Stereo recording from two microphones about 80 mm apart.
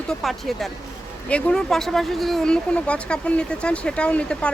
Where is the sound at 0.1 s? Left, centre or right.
Centre.